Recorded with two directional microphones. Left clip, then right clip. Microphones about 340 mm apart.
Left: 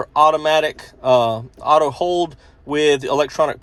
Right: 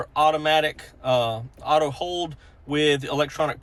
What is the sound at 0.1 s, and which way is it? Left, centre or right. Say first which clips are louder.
Speech: left 6 dB; centre.